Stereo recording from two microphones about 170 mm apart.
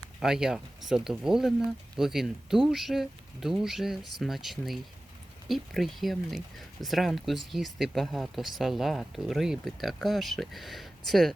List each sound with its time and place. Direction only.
0.2 s speech: 5° right (ahead or behind)